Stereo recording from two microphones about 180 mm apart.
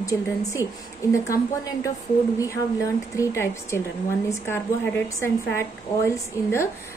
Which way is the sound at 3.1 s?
15° left (ahead or behind).